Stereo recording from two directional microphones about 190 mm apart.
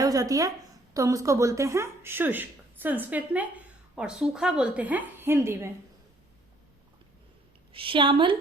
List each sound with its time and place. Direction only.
0.0 s speech: 20° right (ahead or behind)
7.7 s a woman's voice: 25° right (ahead or behind)